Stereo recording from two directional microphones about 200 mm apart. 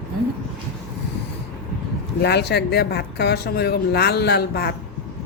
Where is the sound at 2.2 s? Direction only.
55° left (ahead or behind).